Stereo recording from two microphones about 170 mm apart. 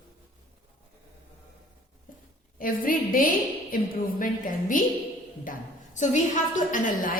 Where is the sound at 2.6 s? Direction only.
55° left (ahead or behind).